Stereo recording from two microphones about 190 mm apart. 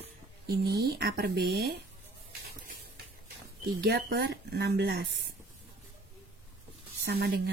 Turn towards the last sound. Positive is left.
turn(degrees=-55)  # may be behind; listen again after turning